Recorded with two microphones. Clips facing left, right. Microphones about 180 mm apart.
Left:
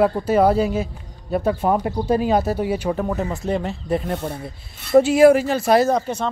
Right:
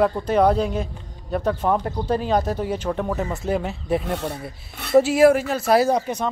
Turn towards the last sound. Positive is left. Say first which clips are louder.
# left 1 dB
turn(degrees=-10)  # may be behind; listen again after turning